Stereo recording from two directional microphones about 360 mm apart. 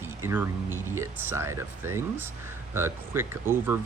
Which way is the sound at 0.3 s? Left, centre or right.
Centre.